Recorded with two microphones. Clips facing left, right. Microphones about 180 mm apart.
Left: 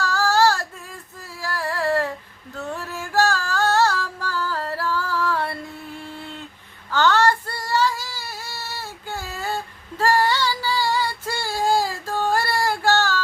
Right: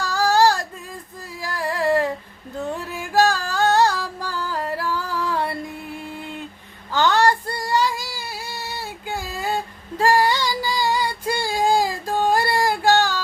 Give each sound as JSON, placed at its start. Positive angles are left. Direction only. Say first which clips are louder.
{"t": 0.0, "sound": "child singing", "louder": "right 1 dB", "side_deg": -15}
{"t": 1.4, "sound": "a sound", "louder": "right 1 dB", "side_deg": -15}
{"t": 2.6, "sound": "music", "louder": "right 3 dB", "side_deg": -15}
{"t": 6.9, "sound": "child singing", "louder": "right 1 dB", "side_deg": -15}
{"t": 10.0, "sound": "female singing", "louder": "right 2 dB", "side_deg": -15}